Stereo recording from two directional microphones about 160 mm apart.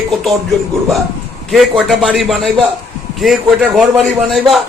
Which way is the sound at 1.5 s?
Centre (ahead or behind).